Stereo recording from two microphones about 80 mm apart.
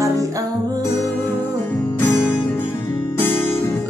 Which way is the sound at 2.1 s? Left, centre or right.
Left.